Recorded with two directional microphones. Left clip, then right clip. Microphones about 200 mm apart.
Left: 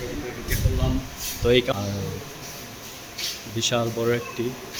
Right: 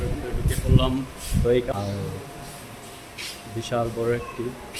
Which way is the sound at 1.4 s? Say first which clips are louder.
Left 2 dB; 10° left (ahead or behind).